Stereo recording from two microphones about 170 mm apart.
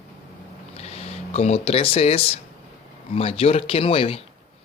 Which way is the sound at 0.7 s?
35° left (ahead or behind).